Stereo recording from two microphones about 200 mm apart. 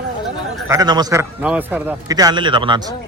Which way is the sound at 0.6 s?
20° right (ahead or behind).